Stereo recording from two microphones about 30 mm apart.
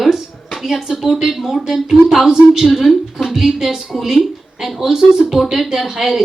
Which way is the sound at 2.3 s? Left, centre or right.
Centre.